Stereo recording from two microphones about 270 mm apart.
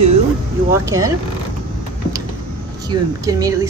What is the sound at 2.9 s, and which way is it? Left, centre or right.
Speech, centre.